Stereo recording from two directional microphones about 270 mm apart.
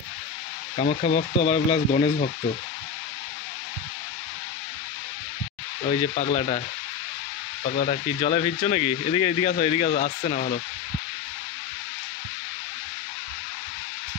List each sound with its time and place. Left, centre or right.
0.7 s speech: left
5.9 s speech: left
7.8 s speech: left